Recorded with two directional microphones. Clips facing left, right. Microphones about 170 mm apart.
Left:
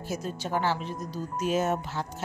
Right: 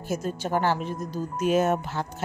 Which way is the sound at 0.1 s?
50° right (ahead or behind).